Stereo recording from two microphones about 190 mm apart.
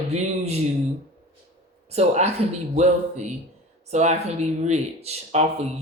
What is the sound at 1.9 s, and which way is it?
Speech, 35° right (ahead or behind).